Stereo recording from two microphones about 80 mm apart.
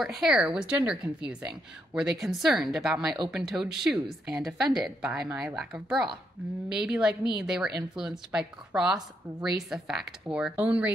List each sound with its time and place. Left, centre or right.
0.0 s a woman's voice: centre
10.3 s a woman's voice: centre